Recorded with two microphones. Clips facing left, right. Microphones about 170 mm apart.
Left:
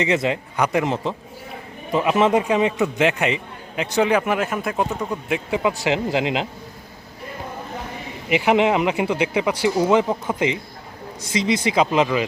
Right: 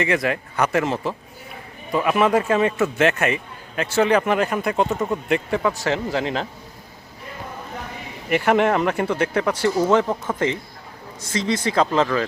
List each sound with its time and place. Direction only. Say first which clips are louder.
0.0 s a man's voice: left 1 dB; 20° left (ahead or behind); by 5.5 s centre (ahead or behind)
5.5 s a man's voice: left 1 dB; 15° left (ahead or behind)
8.3 s a man's voice: left 1 dB; 10° left (ahead or behind)